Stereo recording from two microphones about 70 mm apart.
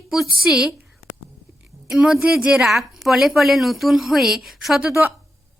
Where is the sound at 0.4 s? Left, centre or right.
Centre.